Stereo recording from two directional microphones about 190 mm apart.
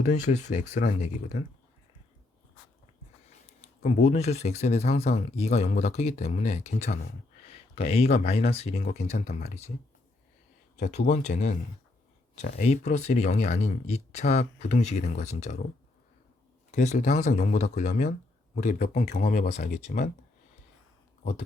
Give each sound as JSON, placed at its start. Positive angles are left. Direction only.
{"t": 0.0, "sound": "speech", "side_deg": 40}
{"t": 3.8, "sound": "speech", "side_deg": 35}
{"t": 10.8, "sound": "speech", "side_deg": 40}
{"t": 16.7, "sound": "speech", "side_deg": 40}
{"t": 18.8, "sound": "speech", "side_deg": 55}
{"t": 19.1, "sound": "speech", "side_deg": 45}